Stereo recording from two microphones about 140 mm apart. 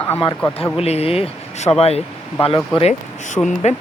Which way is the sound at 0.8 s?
45° left (ahead or behind).